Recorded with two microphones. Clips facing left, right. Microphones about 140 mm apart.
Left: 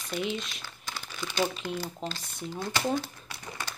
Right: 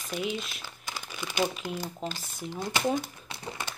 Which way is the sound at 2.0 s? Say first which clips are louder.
Even; 15° right (ahead or behind).